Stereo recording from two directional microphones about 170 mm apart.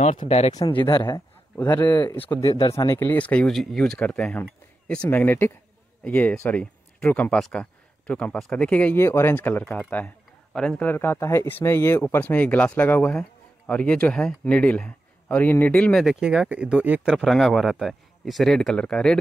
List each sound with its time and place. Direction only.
0.3 s speech: 40° left (ahead or behind)
0.8 s speech: 25° left (ahead or behind)
1.6 s speech: 10° left (ahead or behind)
2.5 s speech: 20° left (ahead or behind); by 19.1 s 5° left (ahead or behind)